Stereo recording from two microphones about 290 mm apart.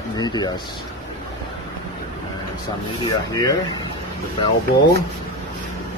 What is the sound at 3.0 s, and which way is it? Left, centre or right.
Speech, centre.